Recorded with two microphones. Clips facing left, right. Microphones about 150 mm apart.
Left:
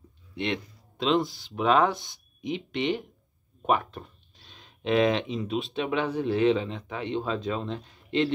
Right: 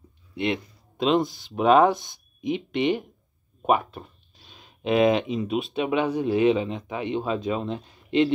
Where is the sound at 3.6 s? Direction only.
10° right (ahead or behind).